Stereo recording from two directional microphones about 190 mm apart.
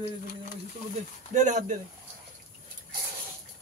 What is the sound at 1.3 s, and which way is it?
Speech, 40° right (ahead or behind).